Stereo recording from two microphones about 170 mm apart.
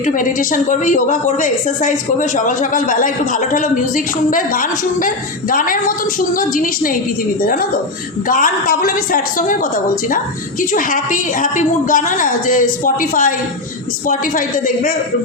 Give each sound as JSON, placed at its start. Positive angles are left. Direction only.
{"t": 0.0, "sound": "a woman's voice", "side_deg": 50}